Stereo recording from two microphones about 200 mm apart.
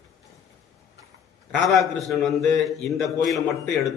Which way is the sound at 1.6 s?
Centre (ahead or behind).